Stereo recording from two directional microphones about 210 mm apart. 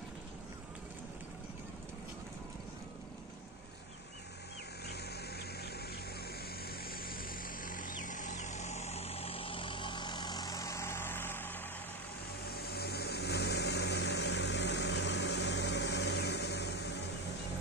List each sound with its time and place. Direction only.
4.8 s vehicle: 50° left (ahead or behind)
6.6 s a sound: 45° left (ahead or behind); by 11.6 s 10° left (ahead or behind)
12.5 s vehicle: 50° left (ahead or behind)